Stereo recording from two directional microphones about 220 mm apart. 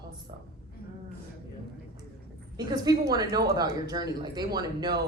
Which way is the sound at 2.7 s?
15° right (ahead or behind).